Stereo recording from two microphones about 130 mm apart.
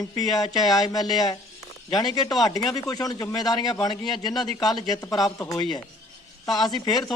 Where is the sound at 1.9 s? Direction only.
30° left (ahead or behind).